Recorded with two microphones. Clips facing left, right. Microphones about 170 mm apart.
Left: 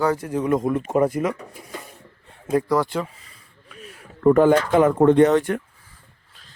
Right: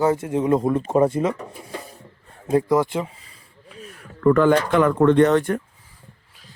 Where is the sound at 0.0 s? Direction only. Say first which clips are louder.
Right 2 dB; 25° right (ahead or behind).